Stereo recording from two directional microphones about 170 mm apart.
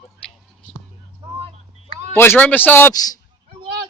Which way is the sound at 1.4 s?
35° right (ahead or behind).